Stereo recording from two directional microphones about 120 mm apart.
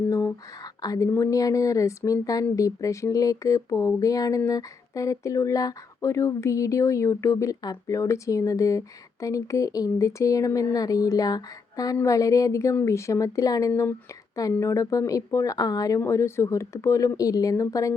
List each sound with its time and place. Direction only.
0.1 s speech: 25° left (ahead or behind)